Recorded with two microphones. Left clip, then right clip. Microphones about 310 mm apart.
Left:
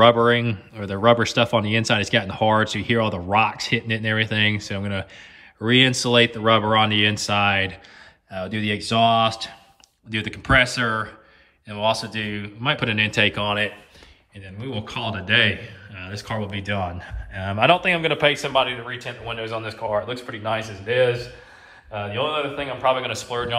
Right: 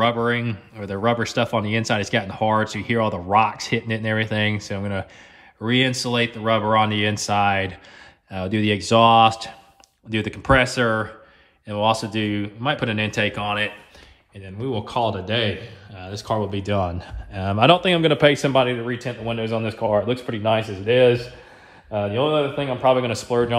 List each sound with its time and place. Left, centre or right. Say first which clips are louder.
0.0 s speech: left 5 dB; centre
8.3 s speech: right 3 dB; centre
14.9 s speech: even; centre; by 23.5 s right